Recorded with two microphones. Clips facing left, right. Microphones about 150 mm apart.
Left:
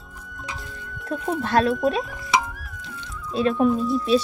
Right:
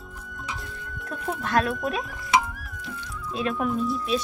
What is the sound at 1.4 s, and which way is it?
Speech, 30° left (ahead or behind).